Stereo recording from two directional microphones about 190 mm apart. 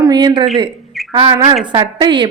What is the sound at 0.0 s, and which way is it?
A woman's voice, 20° right (ahead or behind).